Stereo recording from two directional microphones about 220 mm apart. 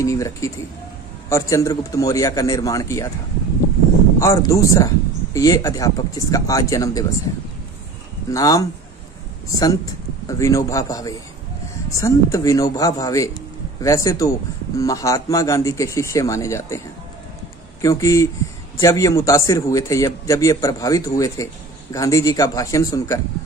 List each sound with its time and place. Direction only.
0.0 s speech: 15° left (ahead or behind)
4.2 s speech: 15° left (ahead or behind)
8.3 s speech: 15° left (ahead or behind)
17.8 s speech: 15° left (ahead or behind)